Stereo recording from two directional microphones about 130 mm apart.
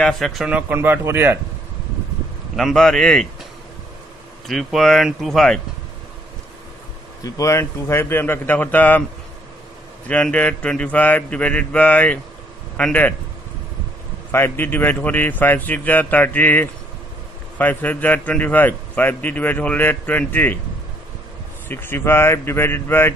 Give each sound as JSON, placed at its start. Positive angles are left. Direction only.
{"t": 0.0, "sound": "speech", "side_deg": 0}
{"t": 0.6, "sound": "speech", "side_deg": -15}
{"t": 2.5, "sound": "speech", "side_deg": 0}
{"t": 4.5, "sound": "speech", "side_deg": 0}
{"t": 7.2, "sound": "a man's voice", "side_deg": 25}
{"t": 10.0, "sound": "a man's voice", "side_deg": 10}
{"t": 14.3, "sound": "a man's voice", "side_deg": 15}
{"t": 21.6, "sound": "a man's voice", "side_deg": 15}